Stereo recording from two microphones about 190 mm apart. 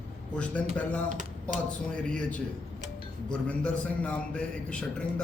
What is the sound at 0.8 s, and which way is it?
Speech, 5° left (ahead or behind).